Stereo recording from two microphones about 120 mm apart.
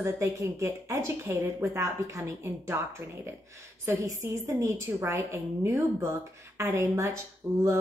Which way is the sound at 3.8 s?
20° right (ahead or behind).